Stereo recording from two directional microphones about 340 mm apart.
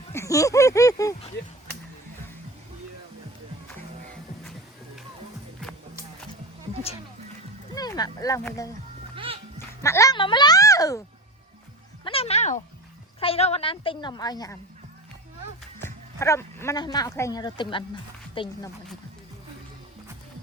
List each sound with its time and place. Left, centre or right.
0.1 s a sound: centre
7.8 s speech: centre
9.1 s music: centre
9.8 s speech: centre
12.0 s a sound: centre
13.1 s a woman's voice: centre
15.8 s speech: centre